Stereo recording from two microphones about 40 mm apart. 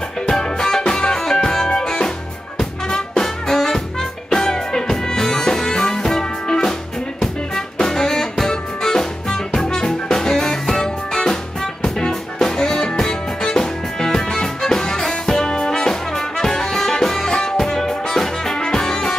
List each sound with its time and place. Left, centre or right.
0.3 s music: centre